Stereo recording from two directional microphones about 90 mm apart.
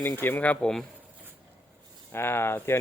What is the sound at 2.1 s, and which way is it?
Speech, 25° left (ahead or behind).